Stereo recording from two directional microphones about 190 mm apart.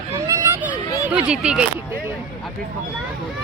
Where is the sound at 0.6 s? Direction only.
5° right (ahead or behind).